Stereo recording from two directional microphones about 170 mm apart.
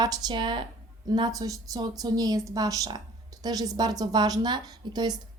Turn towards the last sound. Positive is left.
turn(degrees=-25)  # may be behind; listen again after turning